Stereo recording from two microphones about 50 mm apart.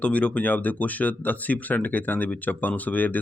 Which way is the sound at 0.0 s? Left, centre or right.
Left.